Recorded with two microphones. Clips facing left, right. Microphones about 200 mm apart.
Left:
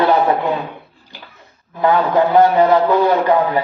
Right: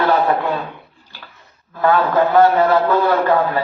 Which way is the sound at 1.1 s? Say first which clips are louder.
Left 3 dB; 15° left (ahead or behind).